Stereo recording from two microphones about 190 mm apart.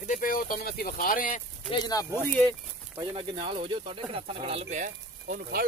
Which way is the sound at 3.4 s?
30° right (ahead or behind).